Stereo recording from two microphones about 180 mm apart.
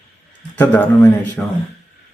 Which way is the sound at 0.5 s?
10° left (ahead or behind).